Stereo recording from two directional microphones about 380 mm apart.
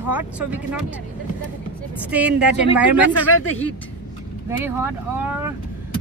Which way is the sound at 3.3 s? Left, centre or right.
Left.